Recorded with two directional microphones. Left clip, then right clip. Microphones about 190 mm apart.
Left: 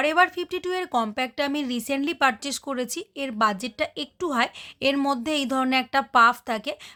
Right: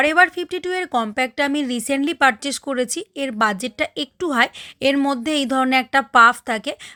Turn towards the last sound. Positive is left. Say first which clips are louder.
# right 5 dB
turn(degrees=-25)  # may be behind; listen again after turning